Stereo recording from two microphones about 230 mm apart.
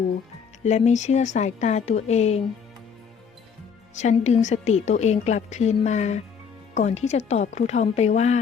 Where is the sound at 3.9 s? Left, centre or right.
Left.